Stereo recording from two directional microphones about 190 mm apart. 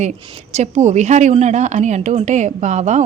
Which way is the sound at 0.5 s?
35° right (ahead or behind).